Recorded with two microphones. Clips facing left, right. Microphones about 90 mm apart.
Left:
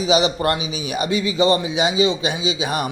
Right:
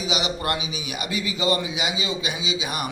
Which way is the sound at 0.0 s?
35° left (ahead or behind).